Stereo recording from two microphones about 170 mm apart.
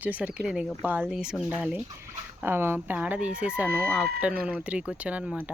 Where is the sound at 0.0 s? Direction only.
10° right (ahead or behind).